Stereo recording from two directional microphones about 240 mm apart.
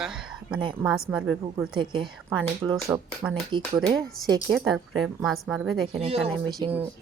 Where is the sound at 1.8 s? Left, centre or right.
Centre.